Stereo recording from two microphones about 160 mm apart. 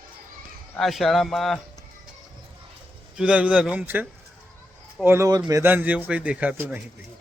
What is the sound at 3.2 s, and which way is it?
Speech, 5° right (ahead or behind).